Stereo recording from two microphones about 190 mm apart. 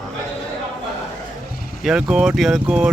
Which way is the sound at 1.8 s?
5° right (ahead or behind).